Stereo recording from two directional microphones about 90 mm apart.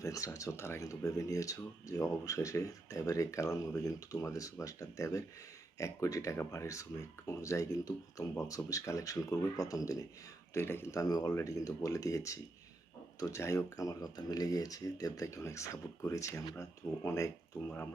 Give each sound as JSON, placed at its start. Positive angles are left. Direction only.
{"t": 0.0, "sound": "speech", "side_deg": 40}
{"t": 10.5, "sound": "speech", "side_deg": 25}